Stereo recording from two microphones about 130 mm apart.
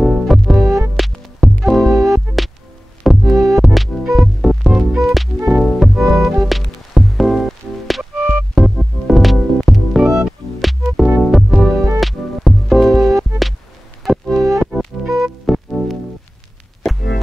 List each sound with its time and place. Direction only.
0.0 s music: centre (ahead or behind)
8.5 s music: centre (ahead or behind)